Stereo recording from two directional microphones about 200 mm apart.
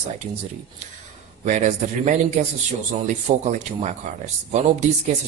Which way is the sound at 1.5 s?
35° right (ahead or behind).